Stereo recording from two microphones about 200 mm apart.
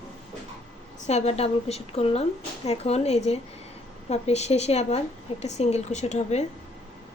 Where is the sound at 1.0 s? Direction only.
35° left (ahead or behind).